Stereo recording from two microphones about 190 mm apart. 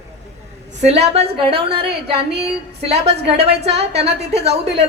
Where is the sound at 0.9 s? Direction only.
35° right (ahead or behind).